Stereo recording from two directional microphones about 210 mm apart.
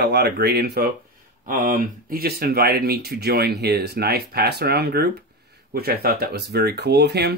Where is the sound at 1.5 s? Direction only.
40° right (ahead or behind).